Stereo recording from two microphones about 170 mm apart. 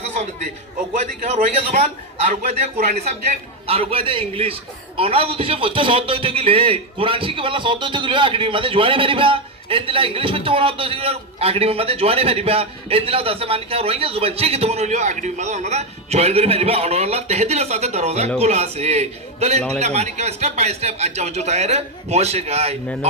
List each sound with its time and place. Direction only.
0.9 s a man's voice: 45° right (ahead or behind)